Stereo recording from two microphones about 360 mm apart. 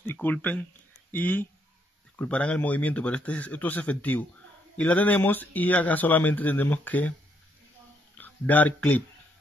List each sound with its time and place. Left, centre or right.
0.0 s speech: centre
8.2 s speech: centre